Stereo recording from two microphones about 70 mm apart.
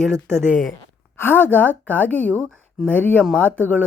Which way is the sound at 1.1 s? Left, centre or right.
Left.